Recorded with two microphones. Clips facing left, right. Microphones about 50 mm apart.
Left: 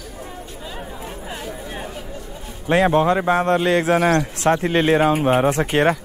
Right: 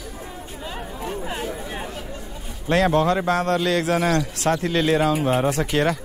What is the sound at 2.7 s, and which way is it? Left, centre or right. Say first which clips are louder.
A man's voice: left 3 dB; left.